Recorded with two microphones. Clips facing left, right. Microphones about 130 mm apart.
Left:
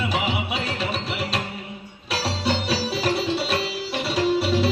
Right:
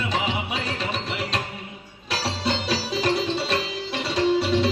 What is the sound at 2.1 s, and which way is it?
Music, 5° left (ahead or behind).